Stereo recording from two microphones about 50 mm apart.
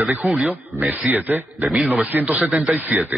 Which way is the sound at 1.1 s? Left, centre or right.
Right.